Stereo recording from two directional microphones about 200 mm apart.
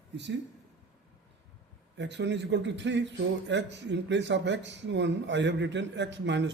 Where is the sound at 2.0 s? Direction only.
60° right (ahead or behind).